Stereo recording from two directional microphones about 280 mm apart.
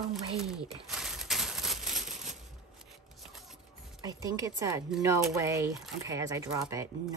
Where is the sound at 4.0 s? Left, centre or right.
Centre.